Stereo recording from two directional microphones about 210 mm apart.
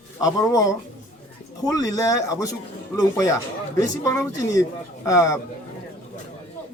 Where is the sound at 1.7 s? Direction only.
15° left (ahead or behind).